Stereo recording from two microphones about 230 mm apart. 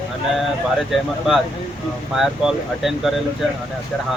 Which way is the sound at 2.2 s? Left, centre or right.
Centre.